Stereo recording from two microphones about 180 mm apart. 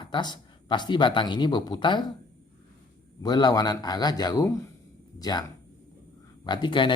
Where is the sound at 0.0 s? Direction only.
25° left (ahead or behind).